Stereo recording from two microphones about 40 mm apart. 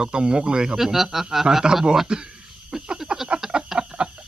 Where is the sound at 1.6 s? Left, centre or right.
Centre.